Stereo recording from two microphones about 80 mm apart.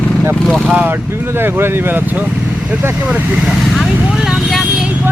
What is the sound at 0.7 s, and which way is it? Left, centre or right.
Speech, right.